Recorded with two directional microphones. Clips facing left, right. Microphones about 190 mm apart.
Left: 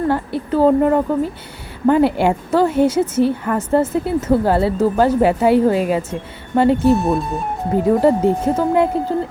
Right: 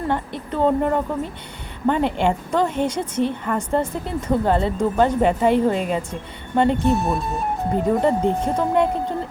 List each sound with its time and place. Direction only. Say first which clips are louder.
0.1 s a woman's voice: left 6 dB; 5° left (ahead or behind)